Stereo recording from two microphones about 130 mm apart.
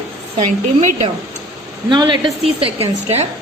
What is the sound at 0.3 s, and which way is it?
Speech, 70° right (ahead or behind).